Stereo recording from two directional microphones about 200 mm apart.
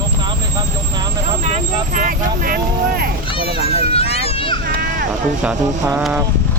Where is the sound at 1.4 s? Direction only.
40° right (ahead or behind).